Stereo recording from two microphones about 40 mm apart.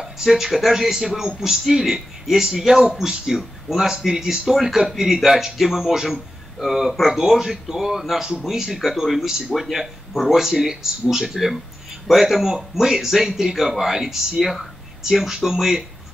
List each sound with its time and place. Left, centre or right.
0.0 s a man's voice: centre